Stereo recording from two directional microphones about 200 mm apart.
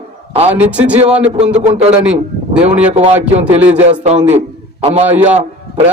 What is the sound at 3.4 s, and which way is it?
Speech, 5° right (ahead or behind).